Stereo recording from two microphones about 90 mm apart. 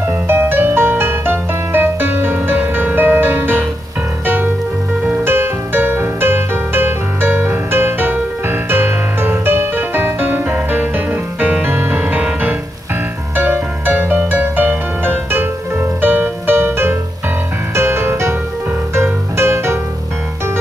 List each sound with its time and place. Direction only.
0.0 s music: 25° right (ahead or behind)
5.2 s music: 25° right (ahead or behind)